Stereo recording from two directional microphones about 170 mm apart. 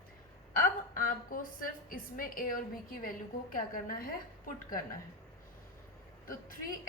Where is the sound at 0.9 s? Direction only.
55° left (ahead or behind).